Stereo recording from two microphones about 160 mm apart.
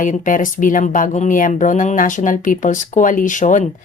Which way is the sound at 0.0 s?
55° left (ahead or behind).